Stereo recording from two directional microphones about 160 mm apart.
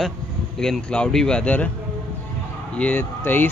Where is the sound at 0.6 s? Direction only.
5° left (ahead or behind).